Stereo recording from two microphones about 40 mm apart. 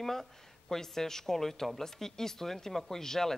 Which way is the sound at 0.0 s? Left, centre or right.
Centre.